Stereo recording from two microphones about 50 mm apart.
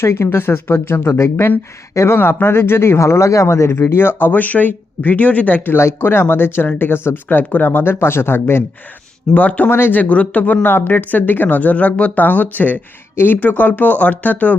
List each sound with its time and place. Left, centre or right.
0.0 s speech: left
5.7 s speech: left
9.3 s speech: left
9.6 s speech: left
10.0 s speech: left